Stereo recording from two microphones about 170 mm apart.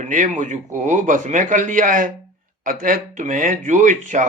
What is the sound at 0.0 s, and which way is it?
Speech, 45° right (ahead or behind).